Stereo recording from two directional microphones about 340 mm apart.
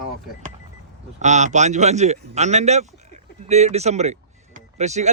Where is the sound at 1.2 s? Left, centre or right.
Right.